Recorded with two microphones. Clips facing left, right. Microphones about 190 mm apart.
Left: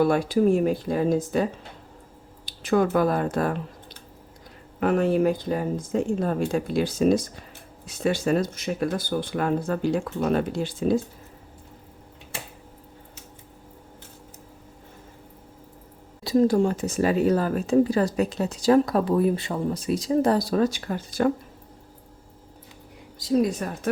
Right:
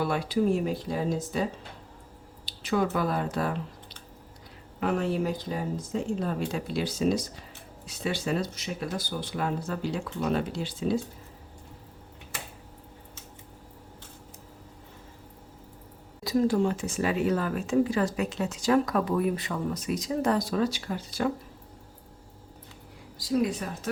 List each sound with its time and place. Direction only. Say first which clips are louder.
0.0 s speech: left 6 dB; 50° left (ahead or behind)
2.5 s speech: left 5 dB; 50° left (ahead or behind)
4.8 s speech: left 6 dB; 55° left (ahead or behind)
16.2 s speech: left 4 dB; 35° left (ahead or behind); by 21.3 s 50° left (ahead or behind)
23.1 s a sound: left 5 dB; 25° left (ahead or behind)
23.4 s speech: left 4 dB; 45° left (ahead or behind)